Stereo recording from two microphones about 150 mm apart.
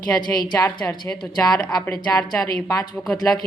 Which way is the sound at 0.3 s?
25° left (ahead or behind).